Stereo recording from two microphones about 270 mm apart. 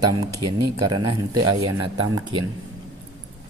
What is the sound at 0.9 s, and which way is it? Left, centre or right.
Speech, centre.